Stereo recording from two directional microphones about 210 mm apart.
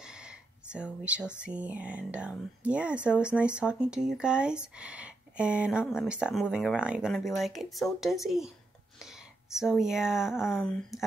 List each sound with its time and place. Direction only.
0.0 s a sound: 5° right (ahead or behind)
1.4 s speech: 5° right (ahead or behind)
9.0 s whispering: centre (ahead or behind)
9.8 s speech: centre (ahead or behind)